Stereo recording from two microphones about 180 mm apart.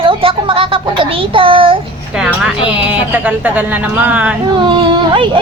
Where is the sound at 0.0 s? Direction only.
30° right (ahead or behind).